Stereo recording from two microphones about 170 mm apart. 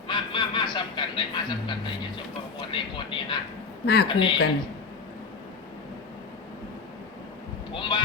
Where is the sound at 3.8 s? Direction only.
70° left (ahead or behind).